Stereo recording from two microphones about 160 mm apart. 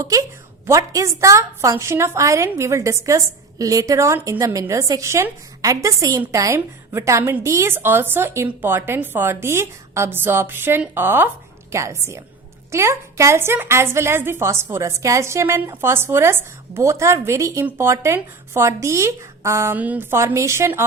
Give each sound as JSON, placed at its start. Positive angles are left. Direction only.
{"t": 0.0, "sound": "a woman's voice", "side_deg": -20}